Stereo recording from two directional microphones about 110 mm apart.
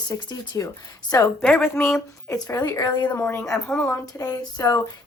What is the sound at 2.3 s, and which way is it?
Speech, 30° left (ahead or behind).